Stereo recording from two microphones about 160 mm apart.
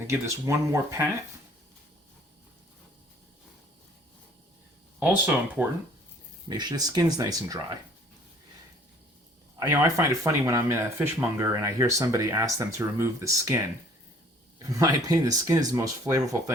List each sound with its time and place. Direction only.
0.1 s speech: 20° right (ahead or behind)
4.9 s speech: 10° right (ahead or behind)
6.5 s speech: 25° right (ahead or behind)
9.6 s speech: 20° right (ahead or behind)
14.6 s speech: 20° right (ahead or behind)